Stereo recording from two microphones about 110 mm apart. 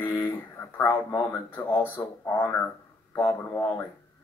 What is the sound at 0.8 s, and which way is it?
Speech, 30° left (ahead or behind).